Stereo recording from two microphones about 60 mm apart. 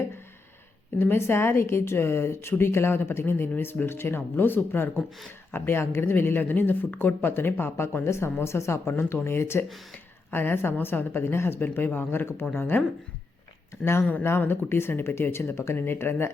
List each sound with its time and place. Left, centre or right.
0.9 s speech: left
14.3 s speech: left